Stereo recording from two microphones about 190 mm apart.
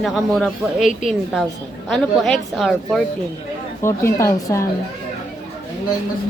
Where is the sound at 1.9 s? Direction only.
Centre (ahead or behind).